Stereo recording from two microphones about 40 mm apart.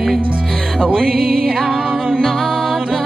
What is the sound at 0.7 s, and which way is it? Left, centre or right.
Music, right.